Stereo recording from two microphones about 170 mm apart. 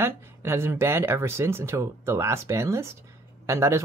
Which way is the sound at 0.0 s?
15° right (ahead or behind).